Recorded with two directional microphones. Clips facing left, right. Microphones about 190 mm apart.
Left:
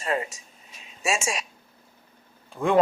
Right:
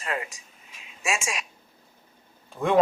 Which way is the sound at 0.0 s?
35° left (ahead or behind).